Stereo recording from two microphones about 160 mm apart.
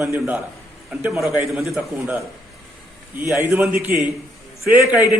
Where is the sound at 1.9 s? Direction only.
15° right (ahead or behind).